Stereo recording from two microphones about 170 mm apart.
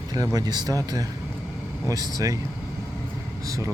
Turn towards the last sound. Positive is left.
turn(degrees=-20)  # may be behind; listen again after turning